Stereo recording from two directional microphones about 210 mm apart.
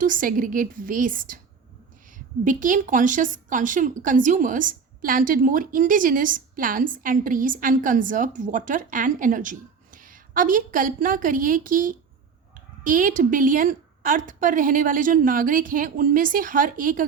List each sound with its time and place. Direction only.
0.0 s a woman's voice: 40° right (ahead or behind)